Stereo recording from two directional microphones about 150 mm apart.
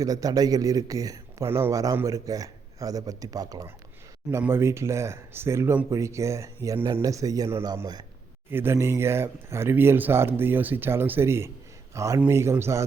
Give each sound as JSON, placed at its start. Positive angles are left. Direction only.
{"t": 0.0, "sound": "speech", "side_deg": -25}
{"t": 8.4, "sound": "speech", "side_deg": -15}